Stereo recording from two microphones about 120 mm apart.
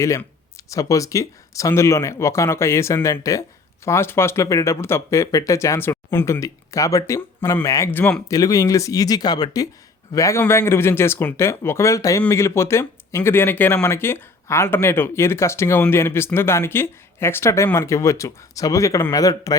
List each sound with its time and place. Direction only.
0.7 s speech: 30° left (ahead or behind)
7.9 s speech: 15° left (ahead or behind)
8.3 s speech: 30° left (ahead or behind)